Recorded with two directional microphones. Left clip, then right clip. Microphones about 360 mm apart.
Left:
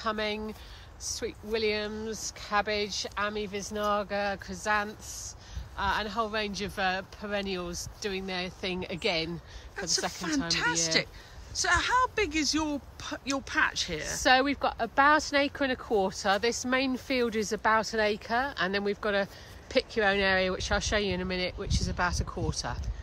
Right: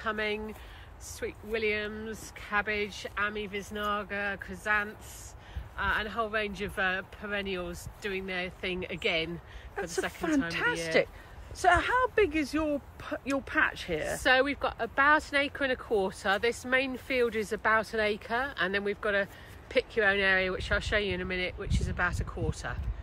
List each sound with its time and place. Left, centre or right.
0.0 s speech: centre
10.5 s speech: centre
14.2 s speech: left